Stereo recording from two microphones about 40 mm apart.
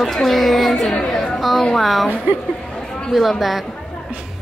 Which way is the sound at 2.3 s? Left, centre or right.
Right.